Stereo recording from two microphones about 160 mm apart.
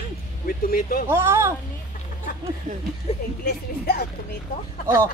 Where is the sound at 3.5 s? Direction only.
75° left (ahead or behind).